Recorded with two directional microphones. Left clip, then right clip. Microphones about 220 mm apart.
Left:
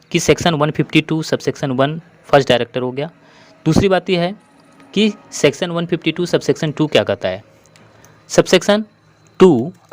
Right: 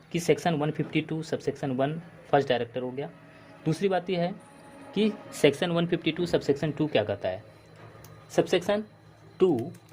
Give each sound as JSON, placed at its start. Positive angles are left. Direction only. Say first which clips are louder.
{"t": 0.1, "sound": "speech", "louder": "left 11 dB", "side_deg": 35}